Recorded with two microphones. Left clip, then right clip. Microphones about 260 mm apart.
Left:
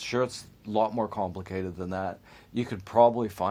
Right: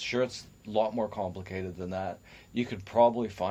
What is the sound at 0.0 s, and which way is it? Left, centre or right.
Speech, left.